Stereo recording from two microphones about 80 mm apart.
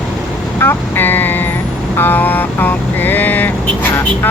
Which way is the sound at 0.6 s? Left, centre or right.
Left.